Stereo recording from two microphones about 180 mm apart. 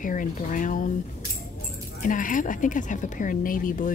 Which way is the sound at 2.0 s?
45° left (ahead or behind).